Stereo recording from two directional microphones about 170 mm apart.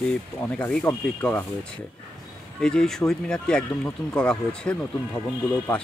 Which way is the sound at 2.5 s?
5° left (ahead or behind).